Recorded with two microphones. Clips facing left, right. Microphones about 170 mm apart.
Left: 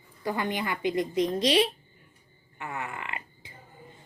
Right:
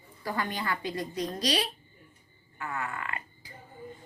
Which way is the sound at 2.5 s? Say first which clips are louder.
Even; 20° left (ahead or behind).